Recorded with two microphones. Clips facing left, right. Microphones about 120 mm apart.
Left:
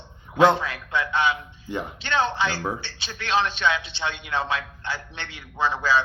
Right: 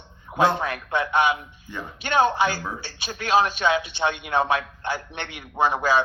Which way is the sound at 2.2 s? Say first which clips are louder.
Right 4 dB; 45° right (ahead or behind).